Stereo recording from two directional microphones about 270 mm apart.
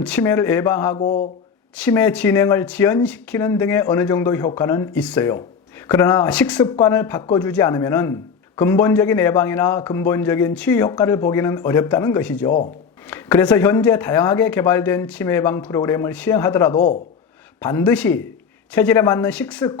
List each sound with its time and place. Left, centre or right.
0.0 s a man's voice: centre
1.0 s speech: left
1.7 s a man's voice: centre
6.6 s a man's voice: centre